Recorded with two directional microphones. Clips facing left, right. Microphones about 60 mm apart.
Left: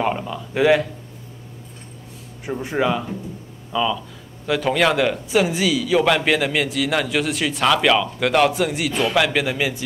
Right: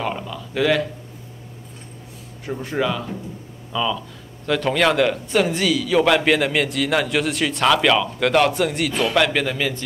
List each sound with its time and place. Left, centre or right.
0.0 s speech: centre
2.4 s speech: centre
3.7 s a man's voice: centre